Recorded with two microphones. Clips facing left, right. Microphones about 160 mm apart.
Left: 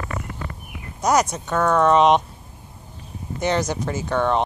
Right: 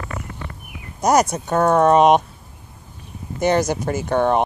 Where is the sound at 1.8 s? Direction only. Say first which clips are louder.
Right 2 dB; 50° right (ahead or behind).